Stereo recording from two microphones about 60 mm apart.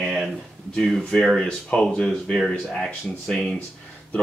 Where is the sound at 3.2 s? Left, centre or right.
Centre.